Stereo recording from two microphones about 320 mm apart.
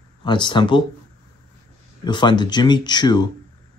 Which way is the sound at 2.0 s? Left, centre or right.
Centre.